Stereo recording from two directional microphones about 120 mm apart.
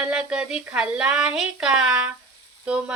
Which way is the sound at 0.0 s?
10° right (ahead or behind).